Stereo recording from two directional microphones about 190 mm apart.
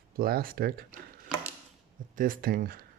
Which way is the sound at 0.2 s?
50° right (ahead or behind).